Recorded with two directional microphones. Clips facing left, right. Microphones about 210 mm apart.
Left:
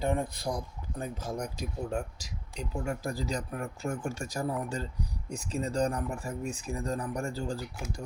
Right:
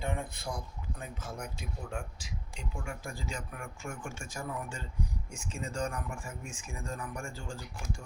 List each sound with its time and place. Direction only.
0.0 s speech: 40° left (ahead or behind)